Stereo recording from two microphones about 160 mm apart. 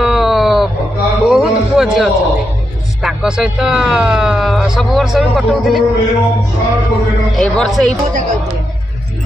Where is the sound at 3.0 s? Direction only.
5° right (ahead or behind).